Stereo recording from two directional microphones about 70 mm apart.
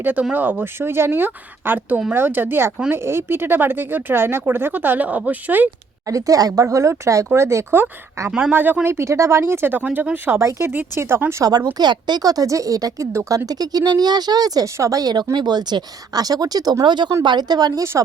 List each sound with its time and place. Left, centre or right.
0.0 s speech: right
6.1 s a woman's voice: right
8.5 s speech: right
8.9 s speech: right
9.8 s speech: right
11.4 s a woman's voice: right
14.8 s speech: right